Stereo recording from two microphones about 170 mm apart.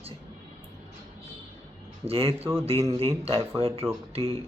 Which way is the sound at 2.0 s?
35° right (ahead or behind).